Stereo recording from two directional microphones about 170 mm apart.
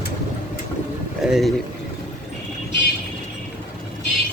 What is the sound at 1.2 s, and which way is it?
Speech, centre (ahead or behind).